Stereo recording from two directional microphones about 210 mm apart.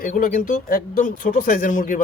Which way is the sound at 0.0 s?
40° left (ahead or behind).